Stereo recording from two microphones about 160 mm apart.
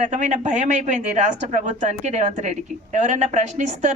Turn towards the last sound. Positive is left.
turn(degrees=-50)  # may be behind; listen again after turning